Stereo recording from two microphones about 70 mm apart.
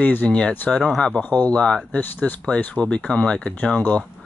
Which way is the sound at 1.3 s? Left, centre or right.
Centre.